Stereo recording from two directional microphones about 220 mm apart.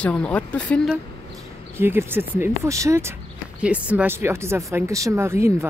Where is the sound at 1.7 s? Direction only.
10° right (ahead or behind).